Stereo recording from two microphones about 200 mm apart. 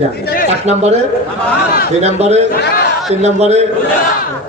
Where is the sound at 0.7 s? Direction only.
35° right (ahead or behind).